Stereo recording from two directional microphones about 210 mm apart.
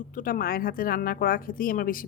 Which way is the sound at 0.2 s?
40° left (ahead or behind).